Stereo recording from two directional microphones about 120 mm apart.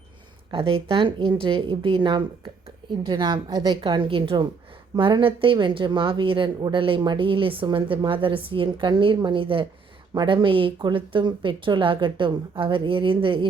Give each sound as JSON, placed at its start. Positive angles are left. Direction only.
{"t": 0.5, "sound": "a woman's voice", "side_deg": -50}